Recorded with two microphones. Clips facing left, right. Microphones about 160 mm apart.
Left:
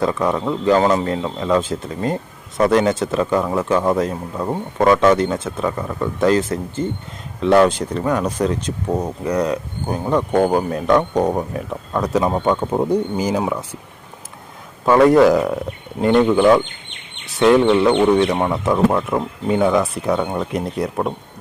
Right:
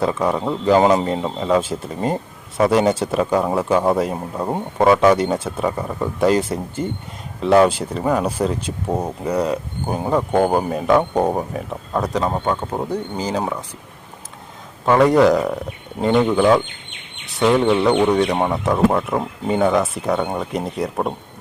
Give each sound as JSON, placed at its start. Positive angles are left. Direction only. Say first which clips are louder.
{"t": 0.2, "sound": "speech", "louder": "left 1 dB", "side_deg": -10}
{"t": 12.2, "sound": "speech", "louder": "left 3 dB", "side_deg": 10}
{"t": 14.8, "sound": "speech", "louder": "left 2 dB", "side_deg": 0}